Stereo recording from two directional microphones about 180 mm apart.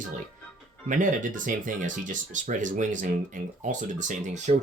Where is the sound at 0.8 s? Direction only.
45° right (ahead or behind).